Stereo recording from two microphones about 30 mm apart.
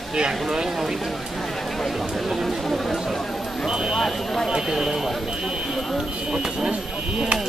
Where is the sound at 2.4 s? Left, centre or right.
Centre.